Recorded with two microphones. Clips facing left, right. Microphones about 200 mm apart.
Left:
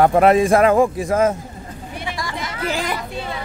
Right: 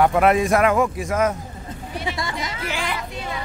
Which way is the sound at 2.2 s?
20° right (ahead or behind).